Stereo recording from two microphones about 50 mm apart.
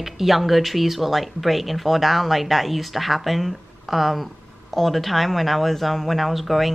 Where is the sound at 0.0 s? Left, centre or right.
Centre.